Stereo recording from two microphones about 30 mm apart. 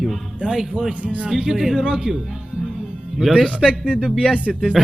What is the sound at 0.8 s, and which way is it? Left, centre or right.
Speech, centre.